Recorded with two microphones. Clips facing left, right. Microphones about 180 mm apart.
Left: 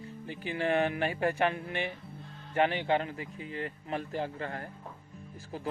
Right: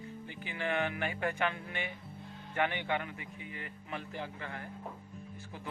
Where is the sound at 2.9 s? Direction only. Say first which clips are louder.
Left 6 dB; 35° left (ahead or behind).